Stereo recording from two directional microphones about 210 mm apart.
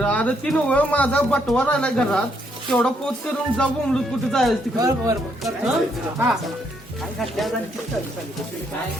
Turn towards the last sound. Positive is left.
turn(degrees=0)  # may be behind; listen again after turning